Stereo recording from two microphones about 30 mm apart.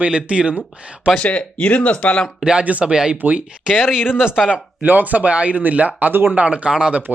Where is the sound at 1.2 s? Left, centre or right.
Left.